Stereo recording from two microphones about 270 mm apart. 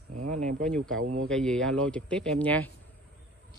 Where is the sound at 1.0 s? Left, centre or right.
Right.